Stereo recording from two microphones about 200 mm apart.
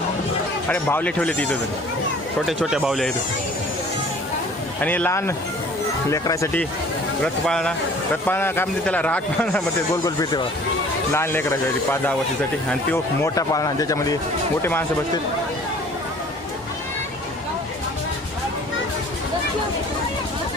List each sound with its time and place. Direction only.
0.7 s a man's voice: 10° left (ahead or behind)
4.8 s a man's voice: 10° left (ahead or behind)
11.1 s a man's voice: 10° left (ahead or behind)